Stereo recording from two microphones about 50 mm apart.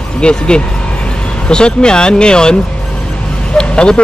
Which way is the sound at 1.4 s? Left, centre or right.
Centre.